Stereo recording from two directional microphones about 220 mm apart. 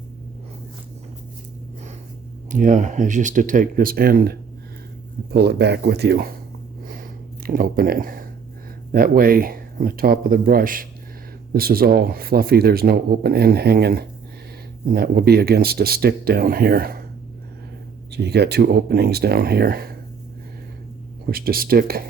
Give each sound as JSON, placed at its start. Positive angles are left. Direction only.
{"t": 2.5, "sound": "speech", "side_deg": -35}
{"t": 6.8, "sound": "a sound", "side_deg": -40}
{"t": 8.9, "sound": "speech", "side_deg": -40}
{"t": 18.1, "sound": "speech", "side_deg": -50}
{"t": 21.2, "sound": "speech", "side_deg": -40}